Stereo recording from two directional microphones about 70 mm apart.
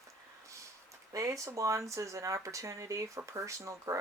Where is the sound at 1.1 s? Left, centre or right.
Right.